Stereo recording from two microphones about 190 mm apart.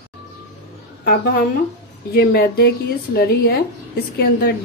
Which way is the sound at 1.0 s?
55° left (ahead or behind).